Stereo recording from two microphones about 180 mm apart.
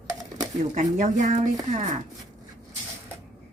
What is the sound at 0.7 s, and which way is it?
Speech, 45° right (ahead or behind).